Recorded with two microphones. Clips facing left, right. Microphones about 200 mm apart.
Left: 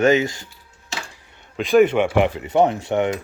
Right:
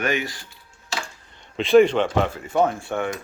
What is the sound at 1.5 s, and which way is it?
Speech, centre (ahead or behind).